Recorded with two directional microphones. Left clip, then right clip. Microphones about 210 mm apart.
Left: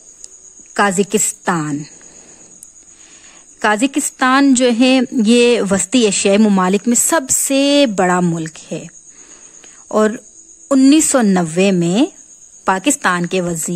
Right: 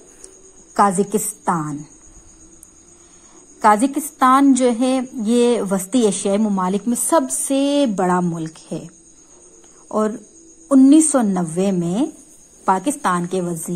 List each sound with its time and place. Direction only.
0.7 s a woman's voice: 50° left (ahead or behind)
3.6 s a woman's voice: 60° left (ahead or behind); by 7.9 s 75° left (ahead or behind)
8.0 s a woman's voice: 60° left (ahead or behind)